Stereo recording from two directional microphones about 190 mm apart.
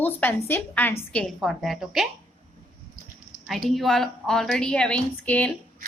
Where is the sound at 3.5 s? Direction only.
Centre (ahead or behind).